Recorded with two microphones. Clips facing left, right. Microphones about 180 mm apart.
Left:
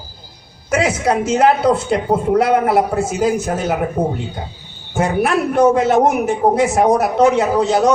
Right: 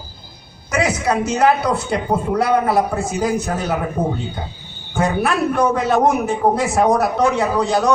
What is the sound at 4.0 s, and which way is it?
A man's voice, 20° left (ahead or behind).